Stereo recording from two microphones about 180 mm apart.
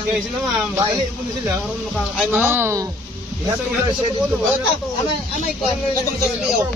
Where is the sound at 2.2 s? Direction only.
Centre (ahead or behind).